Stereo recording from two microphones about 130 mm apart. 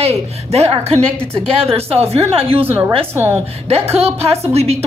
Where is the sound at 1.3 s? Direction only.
5° left (ahead or behind).